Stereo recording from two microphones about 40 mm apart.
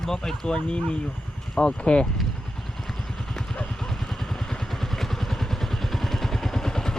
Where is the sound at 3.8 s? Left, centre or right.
Centre.